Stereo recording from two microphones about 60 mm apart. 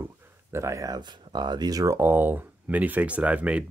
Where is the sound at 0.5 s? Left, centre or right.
Right.